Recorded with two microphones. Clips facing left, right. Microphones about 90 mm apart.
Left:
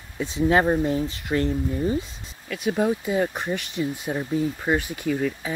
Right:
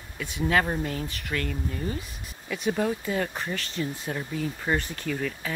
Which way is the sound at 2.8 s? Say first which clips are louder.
Left 5 dB; 15° left (ahead or behind).